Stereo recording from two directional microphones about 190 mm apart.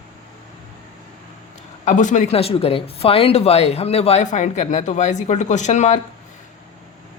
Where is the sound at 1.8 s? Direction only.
40° left (ahead or behind).